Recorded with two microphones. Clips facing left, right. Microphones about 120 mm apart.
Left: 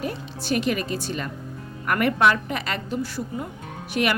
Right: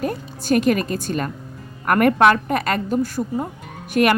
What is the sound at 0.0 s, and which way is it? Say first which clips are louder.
Speech: right 5 dB; 45° right (ahead or behind).